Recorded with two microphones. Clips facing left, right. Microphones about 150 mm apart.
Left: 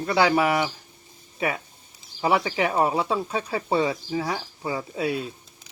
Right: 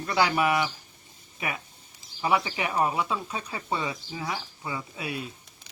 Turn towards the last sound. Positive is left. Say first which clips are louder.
# left 8 dB
turn(degrees=30)  # may be behind; listen again after turning